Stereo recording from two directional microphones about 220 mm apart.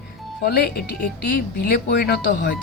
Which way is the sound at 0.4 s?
45° left (ahead or behind).